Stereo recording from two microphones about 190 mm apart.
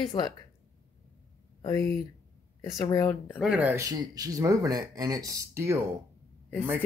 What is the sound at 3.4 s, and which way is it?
Speech, 5° right (ahead or behind).